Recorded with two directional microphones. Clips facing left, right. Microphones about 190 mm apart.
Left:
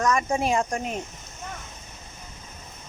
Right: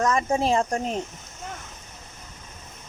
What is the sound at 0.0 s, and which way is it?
Speech, 25° right (ahead or behind).